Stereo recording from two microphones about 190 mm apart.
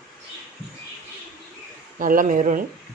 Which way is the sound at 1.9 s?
45° right (ahead or behind).